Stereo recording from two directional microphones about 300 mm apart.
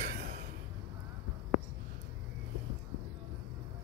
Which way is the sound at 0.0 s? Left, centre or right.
Right.